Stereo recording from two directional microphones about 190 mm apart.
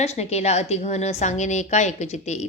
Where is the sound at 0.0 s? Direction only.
35° left (ahead or behind).